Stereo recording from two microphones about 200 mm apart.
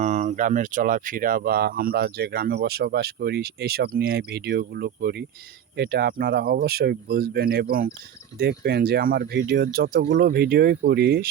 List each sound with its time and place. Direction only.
0.0 s speech: 35° right (ahead or behind); by 11.3 s 50° right (ahead or behind)